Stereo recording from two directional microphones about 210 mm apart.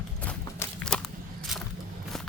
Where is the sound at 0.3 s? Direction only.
5° left (ahead or behind).